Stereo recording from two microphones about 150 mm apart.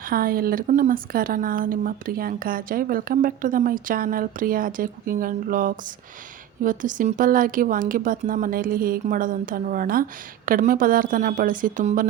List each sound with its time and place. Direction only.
0.0 s a woman's voice: 75° right (ahead or behind)
0.7 s a woman's voice: 65° right (ahead or behind)